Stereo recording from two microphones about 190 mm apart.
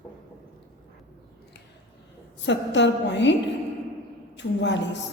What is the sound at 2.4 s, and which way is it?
Speech, 70° left (ahead or behind).